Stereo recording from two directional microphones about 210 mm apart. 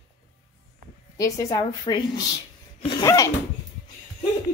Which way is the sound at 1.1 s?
15° left (ahead or behind).